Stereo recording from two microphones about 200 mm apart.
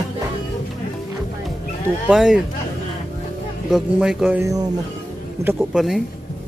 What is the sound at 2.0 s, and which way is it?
Speech, 5° right (ahead or behind).